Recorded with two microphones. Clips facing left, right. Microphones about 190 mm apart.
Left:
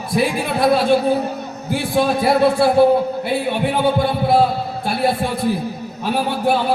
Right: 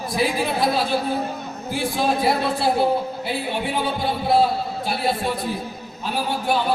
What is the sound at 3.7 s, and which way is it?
Speech, 55° left (ahead or behind).